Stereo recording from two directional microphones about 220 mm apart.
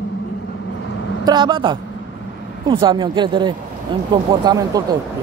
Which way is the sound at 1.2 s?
20° right (ahead or behind).